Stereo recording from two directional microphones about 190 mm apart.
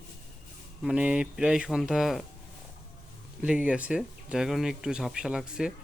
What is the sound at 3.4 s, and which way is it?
Speech, 5° right (ahead or behind).